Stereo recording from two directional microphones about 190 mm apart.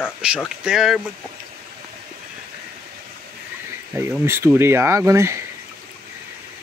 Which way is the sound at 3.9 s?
10° right (ahead or behind).